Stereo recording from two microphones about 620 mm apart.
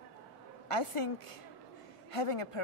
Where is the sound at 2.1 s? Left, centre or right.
Left.